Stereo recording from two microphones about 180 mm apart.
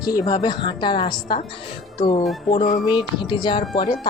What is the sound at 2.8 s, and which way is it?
Speech, 25° left (ahead or behind).